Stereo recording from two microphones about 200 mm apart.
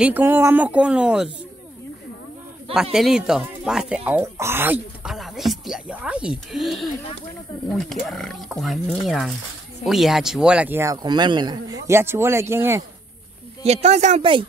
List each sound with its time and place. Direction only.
0.0 s speech: 10° right (ahead or behind)
2.7 s speech: 5° right (ahead or behind)
7.9 s speech: centre (ahead or behind)
13.7 s speech: 35° right (ahead or behind)